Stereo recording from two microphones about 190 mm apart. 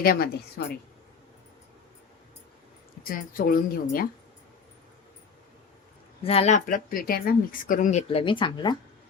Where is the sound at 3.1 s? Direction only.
45° left (ahead or behind).